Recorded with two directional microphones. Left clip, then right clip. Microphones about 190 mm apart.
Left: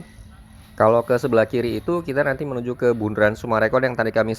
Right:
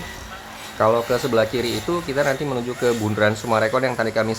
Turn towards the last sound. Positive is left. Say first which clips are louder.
# left 1 dB
turn(degrees=35)  # may be behind; listen again after turning